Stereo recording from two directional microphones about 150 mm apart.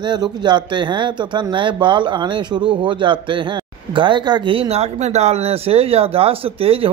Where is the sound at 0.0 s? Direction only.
30° right (ahead or behind).